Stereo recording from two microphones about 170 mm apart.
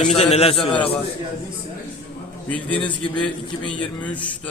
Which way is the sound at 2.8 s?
30° left (ahead or behind).